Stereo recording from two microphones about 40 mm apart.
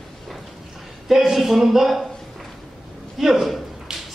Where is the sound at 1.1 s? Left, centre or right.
Centre.